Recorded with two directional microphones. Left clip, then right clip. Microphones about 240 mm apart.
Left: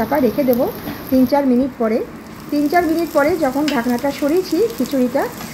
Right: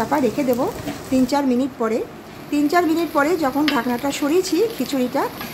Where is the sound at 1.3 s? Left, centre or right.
Centre.